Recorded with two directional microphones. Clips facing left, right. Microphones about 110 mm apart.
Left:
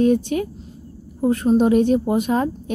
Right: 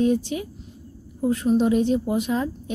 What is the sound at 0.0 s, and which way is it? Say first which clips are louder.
Speech: left 4 dB; 55° left (ahead or behind).